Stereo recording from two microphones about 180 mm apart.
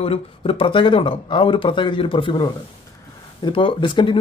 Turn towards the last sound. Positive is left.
turn(degrees=25)  # may be behind; listen again after turning